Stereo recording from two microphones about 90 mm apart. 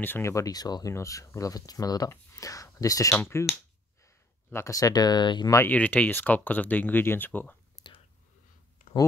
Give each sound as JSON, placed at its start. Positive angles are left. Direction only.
{"t": 0.0, "sound": "speech", "side_deg": 20}
{"t": 0.3, "sound": "speech", "side_deg": 40}
{"t": 0.9, "sound": "speech", "side_deg": 35}
{"t": 4.5, "sound": "speech", "side_deg": 35}
{"t": 5.7, "sound": "speech", "side_deg": 15}
{"t": 7.8, "sound": "whispering", "side_deg": 35}